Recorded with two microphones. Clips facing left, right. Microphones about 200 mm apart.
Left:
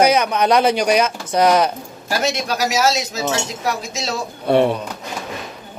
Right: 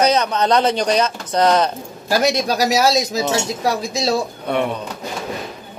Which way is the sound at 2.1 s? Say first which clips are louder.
Right 4 dB; 35° right (ahead or behind).